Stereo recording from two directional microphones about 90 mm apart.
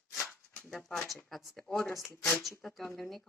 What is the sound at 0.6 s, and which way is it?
Speech, 5° left (ahead or behind).